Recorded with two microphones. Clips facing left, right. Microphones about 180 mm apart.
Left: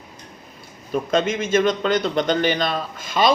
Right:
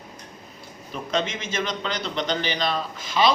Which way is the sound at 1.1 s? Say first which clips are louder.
Left 7 dB; 50° left (ahead or behind).